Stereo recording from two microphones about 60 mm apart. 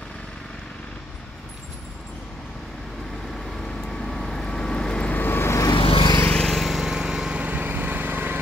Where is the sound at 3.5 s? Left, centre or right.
Centre.